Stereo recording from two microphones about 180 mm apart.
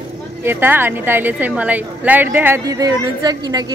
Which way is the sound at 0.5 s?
10° right (ahead or behind).